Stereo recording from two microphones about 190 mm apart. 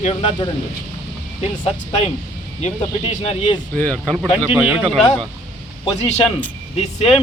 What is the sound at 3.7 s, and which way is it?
Speech, 5° left (ahead or behind).